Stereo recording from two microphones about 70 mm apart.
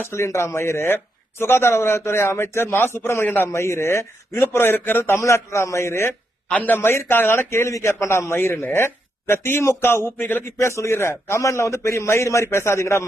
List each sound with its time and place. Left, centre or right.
0.0 s a man's voice: left
3.5 s a man's voice: left
5.2 s a man's voice: left
6.5 s a man's voice: left
10.7 s a man's voice: left